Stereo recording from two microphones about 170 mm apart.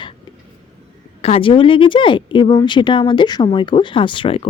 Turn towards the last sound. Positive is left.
turn(degrees=30)  # may be behind; listen again after turning